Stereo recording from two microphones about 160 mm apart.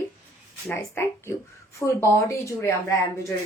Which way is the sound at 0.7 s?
15° left (ahead or behind).